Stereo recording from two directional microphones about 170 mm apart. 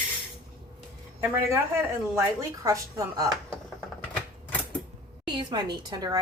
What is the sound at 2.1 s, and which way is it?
Speech, 20° right (ahead or behind).